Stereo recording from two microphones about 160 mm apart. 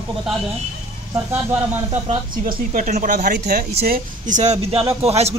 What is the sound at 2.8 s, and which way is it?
Speech, 50° right (ahead or behind).